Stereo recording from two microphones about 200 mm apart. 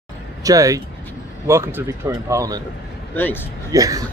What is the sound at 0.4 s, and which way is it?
Speech, 15° right (ahead or behind).